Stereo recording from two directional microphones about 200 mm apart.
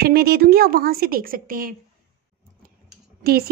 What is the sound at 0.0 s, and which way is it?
Speech, 50° right (ahead or behind).